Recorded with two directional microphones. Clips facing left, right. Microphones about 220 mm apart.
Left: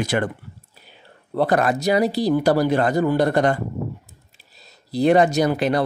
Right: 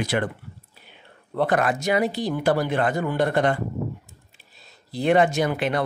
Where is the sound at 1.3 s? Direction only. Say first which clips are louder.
Left 3 dB; 35° left (ahead or behind).